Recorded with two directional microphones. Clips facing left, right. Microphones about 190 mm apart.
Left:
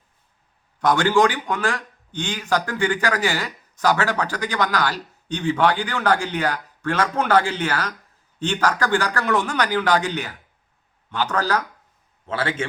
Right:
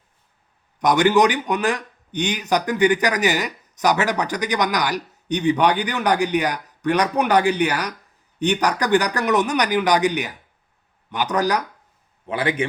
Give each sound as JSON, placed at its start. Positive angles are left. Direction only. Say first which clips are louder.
{"t": 0.8, "sound": "a man's voice", "louder": "right 2 dB", "side_deg": -15}